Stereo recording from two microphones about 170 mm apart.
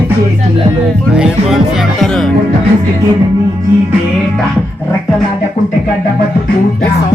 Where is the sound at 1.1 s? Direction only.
5° right (ahead or behind).